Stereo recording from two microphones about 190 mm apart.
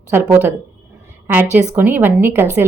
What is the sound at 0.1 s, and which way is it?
A woman's voice, 10° right (ahead or behind).